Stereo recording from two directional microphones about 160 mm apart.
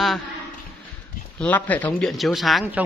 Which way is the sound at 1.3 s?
10° left (ahead or behind).